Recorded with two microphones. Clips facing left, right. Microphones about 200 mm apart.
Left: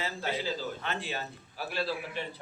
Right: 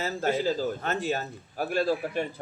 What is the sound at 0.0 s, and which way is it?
A man's voice, 45° right (ahead or behind).